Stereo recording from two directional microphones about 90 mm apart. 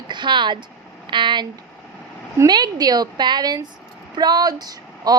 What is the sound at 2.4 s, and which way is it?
A woman's voice, 50° right (ahead or behind).